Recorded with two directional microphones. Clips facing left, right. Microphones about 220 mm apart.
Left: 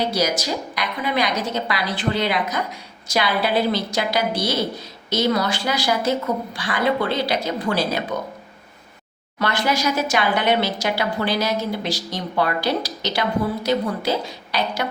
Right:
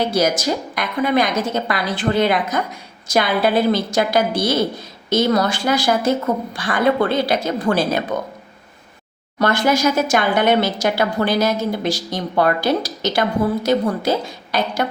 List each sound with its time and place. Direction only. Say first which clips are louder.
0.1 s speech: right 4 dB; 50° right (ahead or behind)
9.4 s speech: right 5 dB; 45° right (ahead or behind)